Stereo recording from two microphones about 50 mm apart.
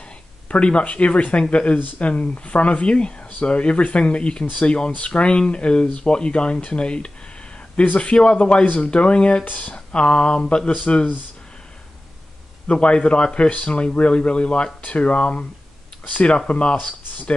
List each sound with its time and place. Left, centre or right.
0.5 s speech: left
9.4 s speech: left
9.9 s speech: left
12.6 s speech: left